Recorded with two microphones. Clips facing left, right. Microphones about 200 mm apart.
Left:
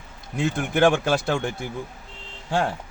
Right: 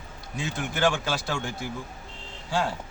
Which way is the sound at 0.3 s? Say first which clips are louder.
Left 8 dB; 55° left (ahead or behind).